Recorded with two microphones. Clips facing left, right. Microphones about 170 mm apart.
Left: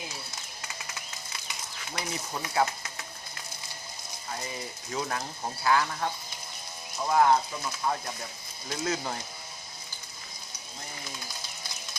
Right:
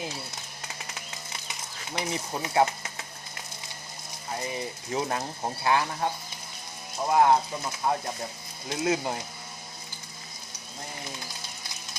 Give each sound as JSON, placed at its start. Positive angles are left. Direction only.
{"t": 2.0, "sound": "speech", "side_deg": -25}
{"t": 4.9, "sound": "speech", "side_deg": -25}